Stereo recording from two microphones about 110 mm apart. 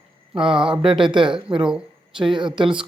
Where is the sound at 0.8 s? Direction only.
50° right (ahead or behind).